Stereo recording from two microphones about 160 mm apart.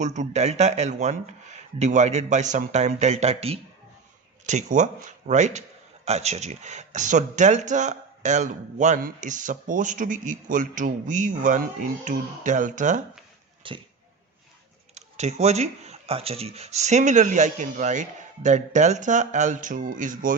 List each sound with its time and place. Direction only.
0.0 s speech: 45° right (ahead or behind)
4.4 s speech: 50° right (ahead or behind)
13.6 s speech: 30° right (ahead or behind)
14.9 s speech: 45° right (ahead or behind)